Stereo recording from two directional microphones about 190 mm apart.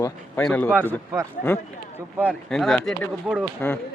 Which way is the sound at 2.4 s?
Centre (ahead or behind).